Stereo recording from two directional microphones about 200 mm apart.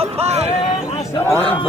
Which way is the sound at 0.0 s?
30° right (ahead or behind).